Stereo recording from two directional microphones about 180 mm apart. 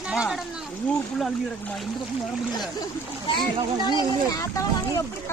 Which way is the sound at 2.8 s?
25° left (ahead or behind).